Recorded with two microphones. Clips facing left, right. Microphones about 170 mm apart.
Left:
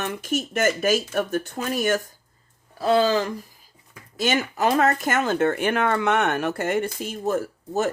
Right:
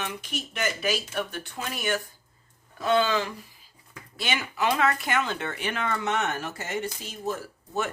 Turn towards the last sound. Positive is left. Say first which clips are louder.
# left 6 dB
turn(degrees=45)  # may be behind; listen again after turning